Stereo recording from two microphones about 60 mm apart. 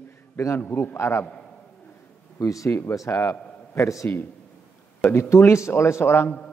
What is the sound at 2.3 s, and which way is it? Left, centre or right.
A man's voice, left.